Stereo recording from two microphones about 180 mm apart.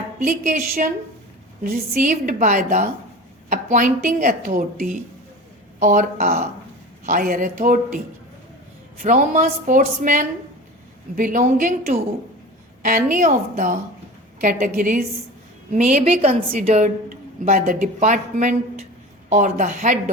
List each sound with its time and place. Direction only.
0.2 s a woman's voice: 55° right (ahead or behind)